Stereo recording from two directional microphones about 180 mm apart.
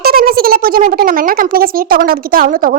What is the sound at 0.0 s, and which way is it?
Speech, 55° right (ahead or behind).